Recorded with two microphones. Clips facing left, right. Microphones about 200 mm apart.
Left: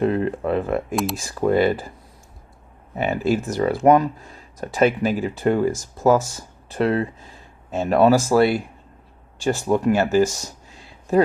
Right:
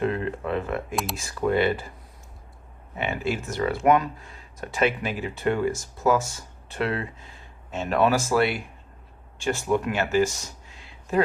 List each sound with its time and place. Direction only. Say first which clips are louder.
0.0 s a sound: left 6 dB; 35° left (ahead or behind)
1.1 s speech: left 3 dB; 35° left (ahead or behind)
2.9 s speech: left 7 dB; 40° left (ahead or behind)